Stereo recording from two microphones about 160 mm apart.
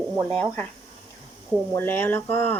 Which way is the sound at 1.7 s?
10° left (ahead or behind).